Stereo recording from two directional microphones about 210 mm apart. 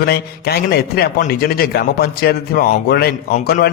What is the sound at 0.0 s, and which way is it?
A man's voice, 50° left (ahead or behind).